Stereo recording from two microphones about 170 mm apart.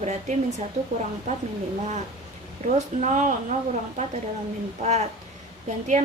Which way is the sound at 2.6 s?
45° right (ahead or behind).